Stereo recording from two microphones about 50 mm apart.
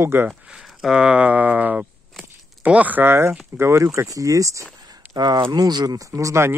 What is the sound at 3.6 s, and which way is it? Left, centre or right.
Speech, right.